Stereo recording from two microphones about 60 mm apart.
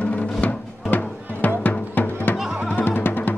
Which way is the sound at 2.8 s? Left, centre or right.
Left.